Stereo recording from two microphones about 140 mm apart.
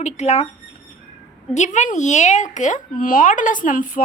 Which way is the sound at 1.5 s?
60° left (ahead or behind).